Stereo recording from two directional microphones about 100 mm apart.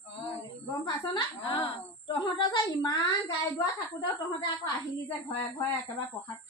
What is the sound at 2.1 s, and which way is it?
Speech, 50° left (ahead or behind).